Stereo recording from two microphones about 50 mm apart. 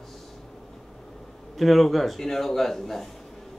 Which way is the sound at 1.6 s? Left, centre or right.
Centre.